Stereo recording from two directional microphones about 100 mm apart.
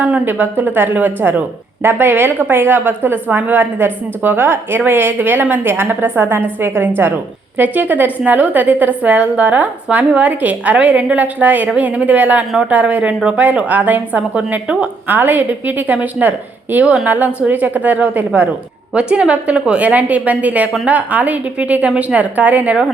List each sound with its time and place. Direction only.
0.0 s a woman's voice: 15° right (ahead or behind)